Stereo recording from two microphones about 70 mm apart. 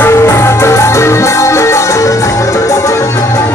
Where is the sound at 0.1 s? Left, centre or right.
Left.